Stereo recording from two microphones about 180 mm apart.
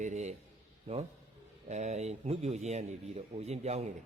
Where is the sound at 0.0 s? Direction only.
40° right (ahead or behind).